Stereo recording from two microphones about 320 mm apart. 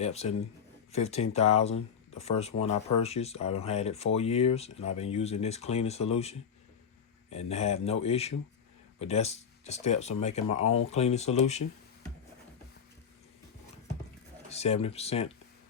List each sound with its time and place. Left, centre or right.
0.0 s speech: centre
14.5 s speech: centre